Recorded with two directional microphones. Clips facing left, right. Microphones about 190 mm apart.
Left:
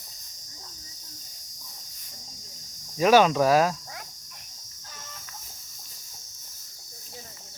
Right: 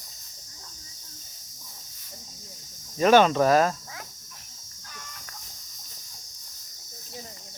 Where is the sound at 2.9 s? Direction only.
5° left (ahead or behind).